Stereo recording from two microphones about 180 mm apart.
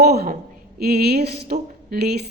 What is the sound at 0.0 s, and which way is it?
A woman's voice, 60° right (ahead or behind).